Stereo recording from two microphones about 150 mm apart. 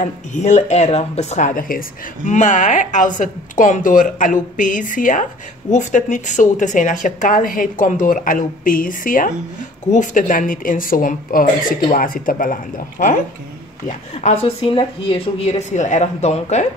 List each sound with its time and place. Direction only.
0.0 s speech: 55° left (ahead or behind)
13.8 s speech: 45° left (ahead or behind)